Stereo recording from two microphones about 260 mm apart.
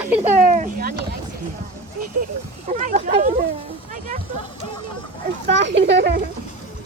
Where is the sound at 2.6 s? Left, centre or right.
Right.